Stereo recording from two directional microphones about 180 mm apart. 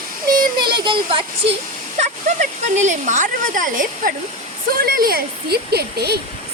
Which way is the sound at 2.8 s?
45° right (ahead or behind).